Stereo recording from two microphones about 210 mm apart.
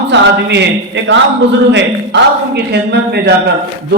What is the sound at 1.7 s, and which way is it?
A man's voice, 55° right (ahead or behind).